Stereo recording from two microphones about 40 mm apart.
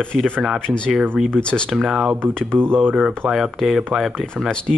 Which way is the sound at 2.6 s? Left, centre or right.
Right.